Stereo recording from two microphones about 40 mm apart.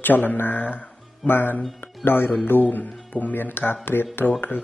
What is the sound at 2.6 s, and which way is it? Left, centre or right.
Speech, left.